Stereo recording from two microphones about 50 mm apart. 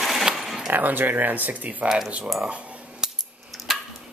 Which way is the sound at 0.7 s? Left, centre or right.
Right.